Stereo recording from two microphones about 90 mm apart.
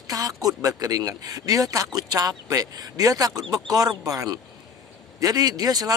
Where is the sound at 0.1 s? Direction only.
45° right (ahead or behind).